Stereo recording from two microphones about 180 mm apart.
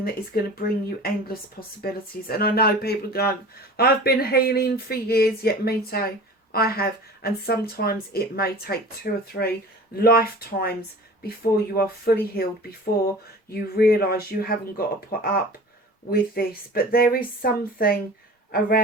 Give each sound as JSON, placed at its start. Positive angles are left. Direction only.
{"t": 0.0, "sound": "speech", "side_deg": 55}